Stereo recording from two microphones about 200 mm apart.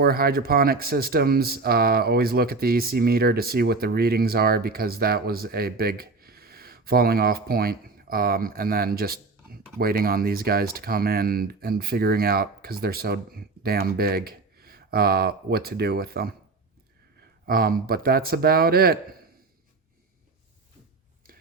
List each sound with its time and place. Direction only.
0.0 s speech: 50° right (ahead or behind)
17.4 s speech: 50° right (ahead or behind)